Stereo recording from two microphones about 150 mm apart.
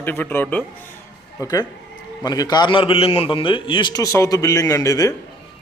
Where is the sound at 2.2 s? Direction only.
25° left (ahead or behind).